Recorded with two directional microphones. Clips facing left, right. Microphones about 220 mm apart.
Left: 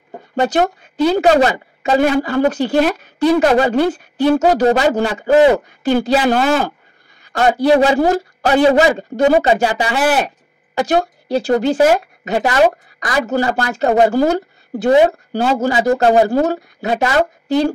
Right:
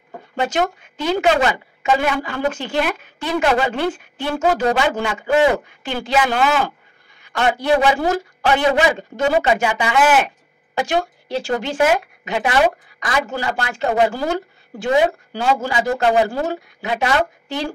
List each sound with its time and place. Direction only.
0.4 s speech: 35° left (ahead or behind)